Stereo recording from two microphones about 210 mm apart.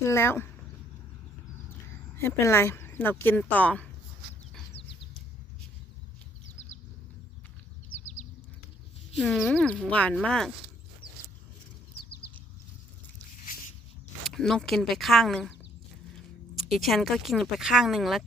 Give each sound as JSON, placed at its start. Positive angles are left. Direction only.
{"t": 0.0, "sound": "speech", "side_deg": 10}
{"t": 2.1, "sound": "speech", "side_deg": 10}
{"t": 7.9, "sound": "a sound", "side_deg": 35}
{"t": 9.1, "sound": "speech", "side_deg": 0}
{"t": 14.3, "sound": "speech", "side_deg": 0}
{"t": 16.6, "sound": "speech", "side_deg": 0}